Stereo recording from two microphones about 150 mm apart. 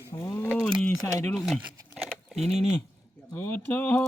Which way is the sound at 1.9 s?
Centre (ahead or behind).